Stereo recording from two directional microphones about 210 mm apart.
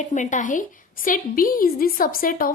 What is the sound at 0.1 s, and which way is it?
A woman's voice, 35° left (ahead or behind).